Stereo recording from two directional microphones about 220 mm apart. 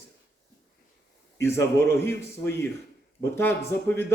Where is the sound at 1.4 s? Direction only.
10° left (ahead or behind).